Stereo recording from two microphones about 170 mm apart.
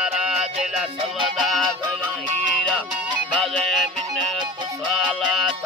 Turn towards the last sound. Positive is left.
turn(degrees=0)  # may be behind; listen again after turning